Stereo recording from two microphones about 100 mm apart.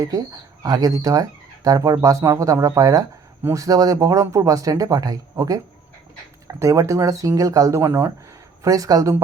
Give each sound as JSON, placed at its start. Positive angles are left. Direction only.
{"t": 0.0, "sound": "speech", "side_deg": -35}
{"t": 8.6, "sound": "speech", "side_deg": -35}